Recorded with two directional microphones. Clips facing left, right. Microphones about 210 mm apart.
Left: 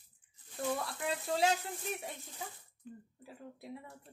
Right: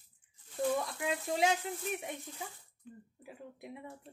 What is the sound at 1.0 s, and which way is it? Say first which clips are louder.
Speech: right 1 dB; 20° right (ahead or behind).